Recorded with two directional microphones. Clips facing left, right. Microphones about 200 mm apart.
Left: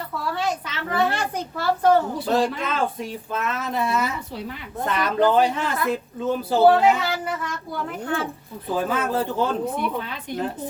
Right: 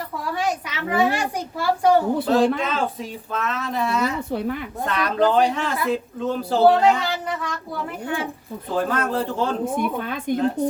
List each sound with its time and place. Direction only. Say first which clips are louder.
0.3 s a child's voice: right 4 dB; 15° right (ahead or behind)
2.2 s speech: right 3 dB; centre (ahead or behind)
4.3 s speech: right 8 dB; 55° right (ahead or behind)
4.9 s speech: even; centre (ahead or behind)
8.0 s a child's voice: left 1 dB; 15° right (ahead or behind)
8.7 s speech: right 1 dB; 5° left (ahead or behind)
9.7 s speech: right 3 dB; 50° right (ahead or behind)